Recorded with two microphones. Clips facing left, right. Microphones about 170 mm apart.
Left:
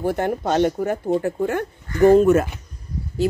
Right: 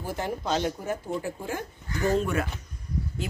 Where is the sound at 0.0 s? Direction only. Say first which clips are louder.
Left 9 dB; 60° left (ahead or behind).